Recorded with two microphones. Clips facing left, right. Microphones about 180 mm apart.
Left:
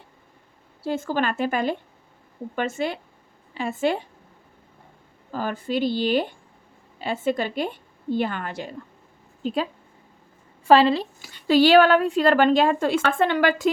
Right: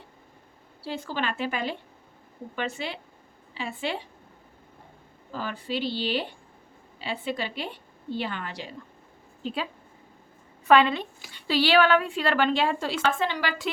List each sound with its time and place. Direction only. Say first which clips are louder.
0.8 s a woman's voice: left 7 dB; 45° left (ahead or behind)
5.3 s a woman's voice: left 5 dB; 50° left (ahead or behind)
10.7 s a woman's voice: left 4 dB; 30° left (ahead or behind); by 13.7 s 50° left (ahead or behind)